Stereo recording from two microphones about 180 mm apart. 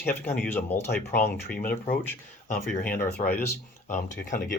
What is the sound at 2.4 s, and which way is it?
Speech, 45° left (ahead or behind).